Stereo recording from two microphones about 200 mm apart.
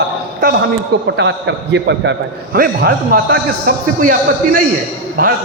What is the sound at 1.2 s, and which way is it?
Speech, 60° right (ahead or behind).